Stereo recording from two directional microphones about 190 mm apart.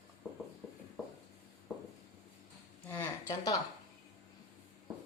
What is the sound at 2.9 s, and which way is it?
Speech, 15° left (ahead or behind).